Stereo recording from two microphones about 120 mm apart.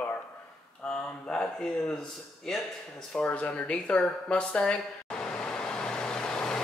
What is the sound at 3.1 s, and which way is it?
Speech, 10° left (ahead or behind).